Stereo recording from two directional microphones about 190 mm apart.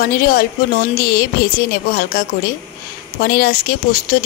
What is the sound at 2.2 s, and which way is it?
Speech, 50° left (ahead or behind).